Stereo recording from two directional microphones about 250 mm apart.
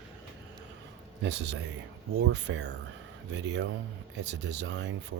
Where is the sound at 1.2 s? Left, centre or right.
Right.